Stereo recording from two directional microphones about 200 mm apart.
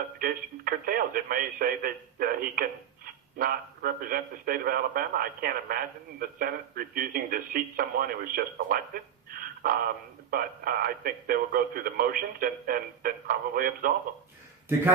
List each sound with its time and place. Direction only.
0.2 s a man's voice: 45° right (ahead or behind)